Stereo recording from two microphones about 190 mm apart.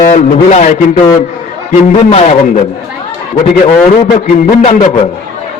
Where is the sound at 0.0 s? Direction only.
40° left (ahead or behind).